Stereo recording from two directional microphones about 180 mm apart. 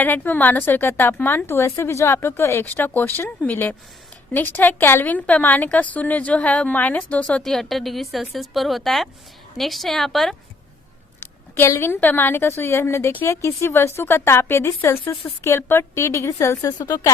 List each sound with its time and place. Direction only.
0.0 s a woman's voice: 10° left (ahead or behind)
11.5 s a woman's voice: 15° left (ahead or behind)